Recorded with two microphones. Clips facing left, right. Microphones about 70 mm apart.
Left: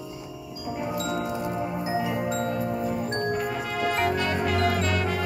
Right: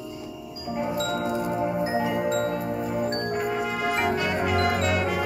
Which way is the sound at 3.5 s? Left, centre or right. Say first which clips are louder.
Right 1 dB; centre.